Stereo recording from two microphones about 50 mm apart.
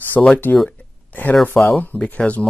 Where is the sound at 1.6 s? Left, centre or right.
Centre.